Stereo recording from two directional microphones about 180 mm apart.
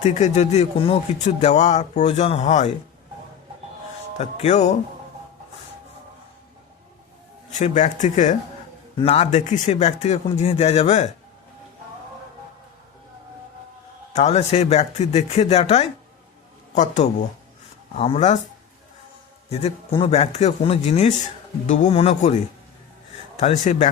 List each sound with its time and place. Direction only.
0.0 s speech: 35° left (ahead or behind)
4.2 s speech: 40° left (ahead or behind)
7.6 s speech: 45° left (ahead or behind)
14.1 s speech: 40° left (ahead or behind)
19.5 s speech: 30° left (ahead or behind)
23.4 s speech: 40° left (ahead or behind)